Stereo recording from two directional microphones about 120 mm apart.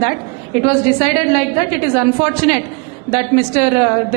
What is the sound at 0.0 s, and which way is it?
A woman's voice, 20° right (ahead or behind).